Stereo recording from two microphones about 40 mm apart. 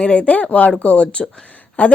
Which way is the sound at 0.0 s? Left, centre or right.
Left.